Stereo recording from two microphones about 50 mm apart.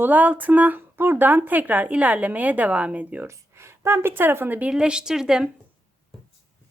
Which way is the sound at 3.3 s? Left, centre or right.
Right.